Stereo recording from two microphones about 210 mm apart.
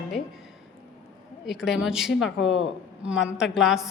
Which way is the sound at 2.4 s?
60° left (ahead or behind).